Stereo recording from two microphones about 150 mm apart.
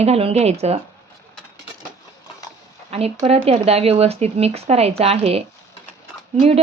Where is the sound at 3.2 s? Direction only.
40° right (ahead or behind).